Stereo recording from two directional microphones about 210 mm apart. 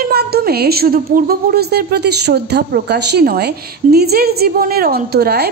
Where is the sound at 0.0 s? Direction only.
50° right (ahead or behind).